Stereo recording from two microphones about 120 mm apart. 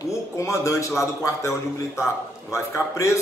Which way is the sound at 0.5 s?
25° left (ahead or behind).